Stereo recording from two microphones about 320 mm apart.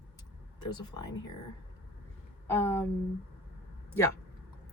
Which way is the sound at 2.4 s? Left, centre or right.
Centre.